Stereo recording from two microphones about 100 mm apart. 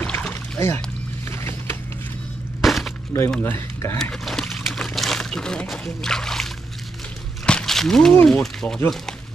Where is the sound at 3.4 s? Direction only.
25° left (ahead or behind).